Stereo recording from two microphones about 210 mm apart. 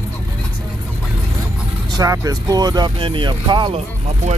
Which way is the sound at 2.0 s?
15° right (ahead or behind).